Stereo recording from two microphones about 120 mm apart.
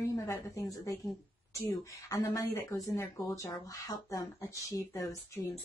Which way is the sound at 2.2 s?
30° left (ahead or behind).